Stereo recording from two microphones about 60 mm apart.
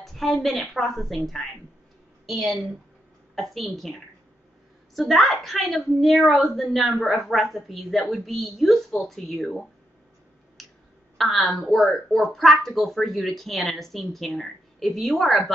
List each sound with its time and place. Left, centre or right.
0.0 s a woman's voice: centre
10.6 s clicking: centre
11.1 s a woman's voice: centre